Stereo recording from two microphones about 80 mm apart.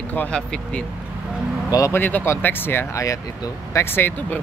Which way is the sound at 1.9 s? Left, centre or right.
Left.